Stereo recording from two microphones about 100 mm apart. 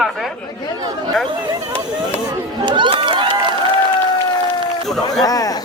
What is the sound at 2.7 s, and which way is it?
Speech, 50° right (ahead or behind).